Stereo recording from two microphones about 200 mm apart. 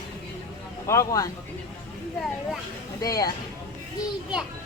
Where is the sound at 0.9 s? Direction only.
15° left (ahead or behind).